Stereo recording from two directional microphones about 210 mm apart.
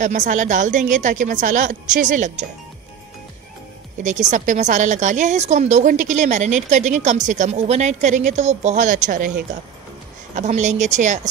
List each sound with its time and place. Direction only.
0.0 s a woman's voice: 35° right (ahead or behind)
4.3 s a woman's voice: 35° right (ahead or behind)
10.3 s a woman's voice: 35° right (ahead or behind)